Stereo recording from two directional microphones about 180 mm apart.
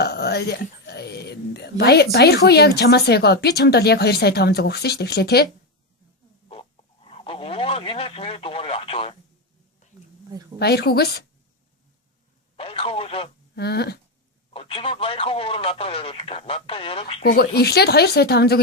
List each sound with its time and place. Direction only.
0.0 s whispering: 65° left (ahead or behind)
1.8 s speech: 65° left (ahead or behind)
6.5 s a sound: 30° left (ahead or behind)
9.8 s a sound: 40° left (ahead or behind)
10.6 s speech: 65° left (ahead or behind)
12.5 s speech: 30° left (ahead or behind)
13.6 s speech: 65° left (ahead or behind)
14.5 s speech: 30° left (ahead or behind)
17.3 s speech: 65° left (ahead or behind)